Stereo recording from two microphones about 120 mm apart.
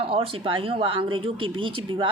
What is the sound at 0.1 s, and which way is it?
Speech, 50° right (ahead or behind).